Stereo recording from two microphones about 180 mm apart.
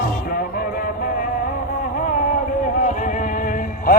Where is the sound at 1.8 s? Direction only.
50° left (ahead or behind).